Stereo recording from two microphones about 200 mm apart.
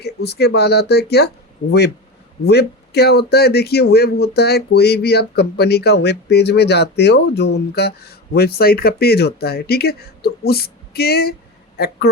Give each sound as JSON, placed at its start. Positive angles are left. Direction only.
{"t": 0.0, "sound": "speech", "side_deg": 55}
{"t": 2.4, "sound": "speech", "side_deg": 55}